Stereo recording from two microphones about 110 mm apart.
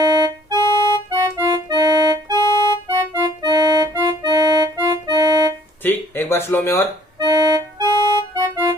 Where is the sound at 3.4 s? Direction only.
35° right (ahead or behind).